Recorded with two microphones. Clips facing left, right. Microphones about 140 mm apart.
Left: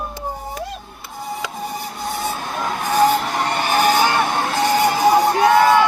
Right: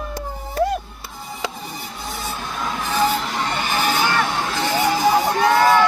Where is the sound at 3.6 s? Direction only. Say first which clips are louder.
Left 7 dB; 55° left (ahead or behind).